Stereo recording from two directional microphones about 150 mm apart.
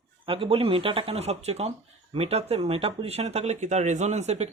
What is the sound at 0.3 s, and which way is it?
Speech, 40° right (ahead or behind).